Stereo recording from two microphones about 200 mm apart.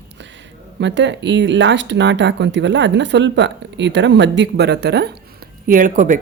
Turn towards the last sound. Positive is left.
turn(degrees=-40)  # may be behind; listen again after turning